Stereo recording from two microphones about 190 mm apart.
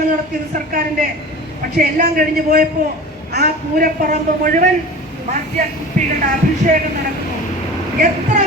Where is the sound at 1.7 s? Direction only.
50° right (ahead or behind).